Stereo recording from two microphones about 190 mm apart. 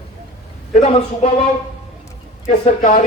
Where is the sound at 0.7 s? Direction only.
35° left (ahead or behind).